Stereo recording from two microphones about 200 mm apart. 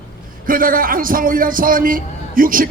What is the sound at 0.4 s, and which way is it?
A man's voice, 45° right (ahead or behind).